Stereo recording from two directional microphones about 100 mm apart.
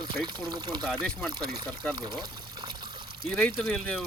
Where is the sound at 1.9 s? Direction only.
40° right (ahead or behind).